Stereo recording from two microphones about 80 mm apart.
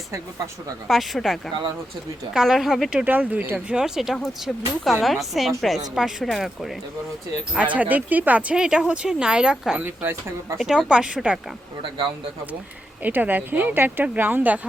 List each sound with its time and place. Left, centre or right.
0.9 s speech: centre
2.9 s speech: right
3.7 s speech: centre
7.5 s speech: centre
9.8 s speech: right
10.6 s speech: centre
13.0 s speech: right